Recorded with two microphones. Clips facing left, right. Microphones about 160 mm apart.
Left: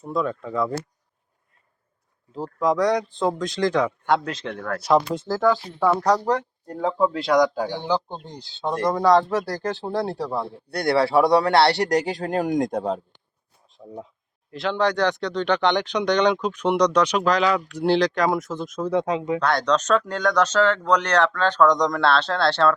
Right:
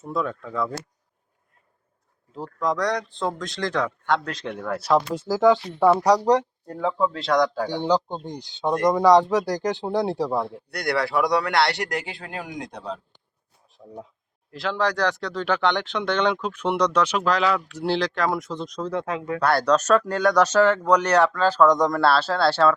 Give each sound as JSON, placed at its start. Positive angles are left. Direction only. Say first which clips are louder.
{"t": 0.1, "sound": "speech", "louder": "left 2 dB", "side_deg": 0}
{"t": 2.6, "sound": "speech", "louder": "left 4 dB", "side_deg": 5}
{"t": 4.5, "sound": "speech", "louder": "left 1 dB", "side_deg": -10}
{"t": 7.0, "sound": "speech", "louder": "left 3 dB", "side_deg": 10}
{"t": 7.9, "sound": "speech", "louder": "right 3 dB", "side_deg": -20}
{"t": 10.7, "sound": "a man's voice", "louder": "left 7 dB", "side_deg": 30}
{"t": 13.8, "sound": "speech", "louder": "left 2 dB", "side_deg": 5}
{"t": 19.4, "sound": "speech", "louder": "right 6 dB", "side_deg": -5}